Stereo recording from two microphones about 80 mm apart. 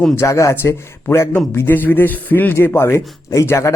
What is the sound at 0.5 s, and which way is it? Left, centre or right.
Speech, left.